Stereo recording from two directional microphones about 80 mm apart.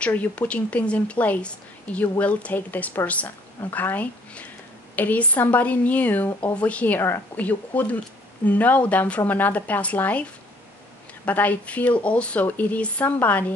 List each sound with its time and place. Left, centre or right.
0.0 s a woman's voice: centre
11.2 s a woman's voice: centre